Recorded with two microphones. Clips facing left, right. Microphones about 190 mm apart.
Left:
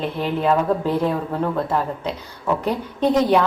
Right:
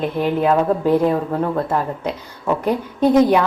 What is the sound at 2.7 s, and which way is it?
Speech, 10° right (ahead or behind).